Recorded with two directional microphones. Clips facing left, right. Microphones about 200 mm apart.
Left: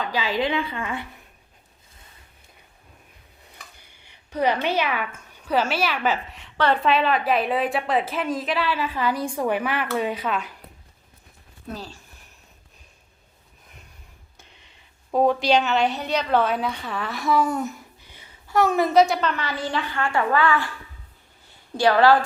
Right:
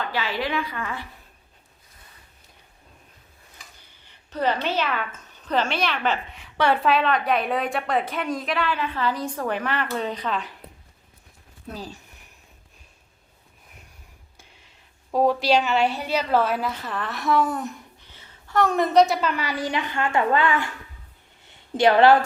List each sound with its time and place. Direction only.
0.0 s a woman's voice: 15° left (ahead or behind)
3.9 s a woman's voice: 15° left (ahead or behind)
11.7 s a woman's voice: 15° right (ahead or behind)
14.3 s gasp: 5° right (ahead or behind)
15.1 s a woman's voice: centre (ahead or behind)
18.1 s a woman's voice: 10° left (ahead or behind); by 20.7 s 20° right (ahead or behind)
21.8 s a woman's voice: 20° right (ahead or behind)